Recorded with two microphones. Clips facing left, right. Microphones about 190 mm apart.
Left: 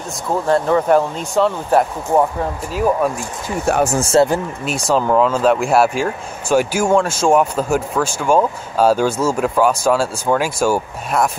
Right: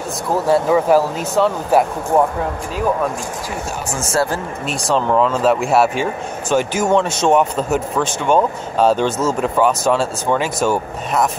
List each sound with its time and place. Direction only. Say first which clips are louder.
0.5 s speech: right 1 dB; 5° right (ahead or behind)
3.6 s speech: left 10 dB; 60° left (ahead or behind)
4.1 s speech: left 4 dB; 20° left (ahead or behind)
4.6 s speech: left 1 dB; centre (ahead or behind)
6.5 s speech: left 1 dB; 10° left (ahead or behind)